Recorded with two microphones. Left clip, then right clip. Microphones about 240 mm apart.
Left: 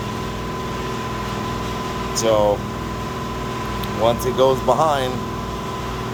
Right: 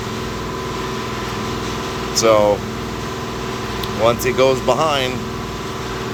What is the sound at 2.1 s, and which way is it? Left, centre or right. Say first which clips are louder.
Speech: right 4 dB; centre.